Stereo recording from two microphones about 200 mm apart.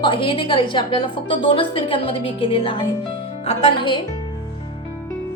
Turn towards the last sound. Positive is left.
turn(degrees=25)  # may be behind; listen again after turning